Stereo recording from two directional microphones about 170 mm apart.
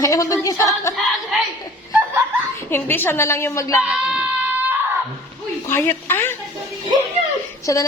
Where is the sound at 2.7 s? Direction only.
15° left (ahead or behind).